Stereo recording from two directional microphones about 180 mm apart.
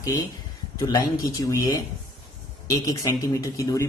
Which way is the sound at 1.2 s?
20° left (ahead or behind).